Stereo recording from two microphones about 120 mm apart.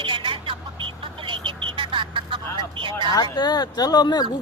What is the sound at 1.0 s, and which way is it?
Vehicle, 45° right (ahead or behind).